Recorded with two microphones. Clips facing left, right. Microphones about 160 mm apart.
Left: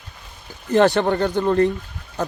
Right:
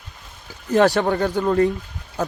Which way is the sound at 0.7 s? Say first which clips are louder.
Left 1 dB; centre (ahead or behind).